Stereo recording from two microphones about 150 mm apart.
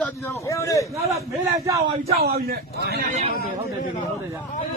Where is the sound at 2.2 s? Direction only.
90° right.